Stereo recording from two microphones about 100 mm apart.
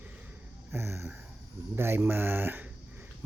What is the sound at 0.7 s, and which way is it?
Speech, 25° right (ahead or behind).